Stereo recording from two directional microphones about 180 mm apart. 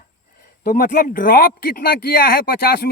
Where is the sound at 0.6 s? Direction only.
55° left (ahead or behind).